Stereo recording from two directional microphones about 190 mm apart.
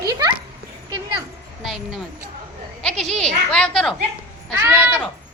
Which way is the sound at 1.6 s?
Centre (ahead or behind).